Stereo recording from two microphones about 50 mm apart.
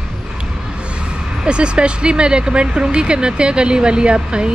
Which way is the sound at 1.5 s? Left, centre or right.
Right.